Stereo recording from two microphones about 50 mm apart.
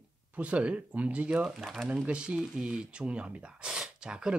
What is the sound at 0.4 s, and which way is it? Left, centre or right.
Speech, right.